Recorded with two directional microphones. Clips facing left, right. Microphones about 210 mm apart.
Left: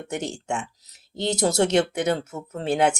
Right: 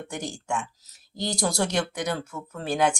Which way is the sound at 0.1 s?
25° left (ahead or behind).